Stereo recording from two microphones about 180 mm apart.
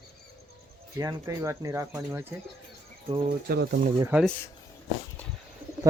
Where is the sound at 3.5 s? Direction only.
70° right (ahead or behind).